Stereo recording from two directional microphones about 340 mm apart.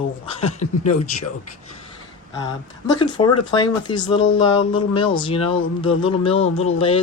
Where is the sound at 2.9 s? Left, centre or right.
Centre.